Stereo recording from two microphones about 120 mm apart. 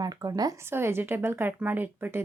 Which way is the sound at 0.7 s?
20° right (ahead or behind).